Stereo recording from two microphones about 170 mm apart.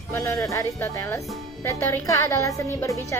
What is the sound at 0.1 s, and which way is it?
A woman's voice, 15° left (ahead or behind).